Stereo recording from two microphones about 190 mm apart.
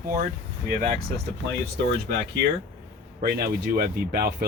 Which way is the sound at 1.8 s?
60° right (ahead or behind).